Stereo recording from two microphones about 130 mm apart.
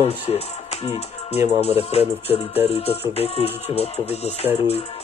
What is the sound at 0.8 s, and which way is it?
Speech, 55° left (ahead or behind).